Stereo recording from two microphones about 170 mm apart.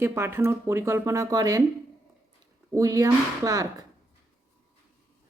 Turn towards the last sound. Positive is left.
turn(degrees=-20)  # may be behind; listen again after turning